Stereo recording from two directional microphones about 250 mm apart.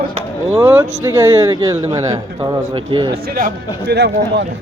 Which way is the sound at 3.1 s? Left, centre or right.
Right.